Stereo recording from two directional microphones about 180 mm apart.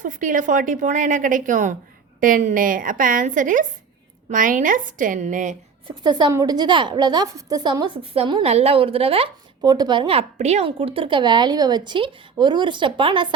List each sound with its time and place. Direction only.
0.0 s a woman's voice: 45° right (ahead or behind)
5.9 s a woman's voice: 25° right (ahead or behind)
9.6 s a woman's voice: 20° right (ahead or behind)